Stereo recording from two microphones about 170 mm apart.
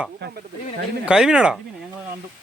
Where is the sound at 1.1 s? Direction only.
5° right (ahead or behind).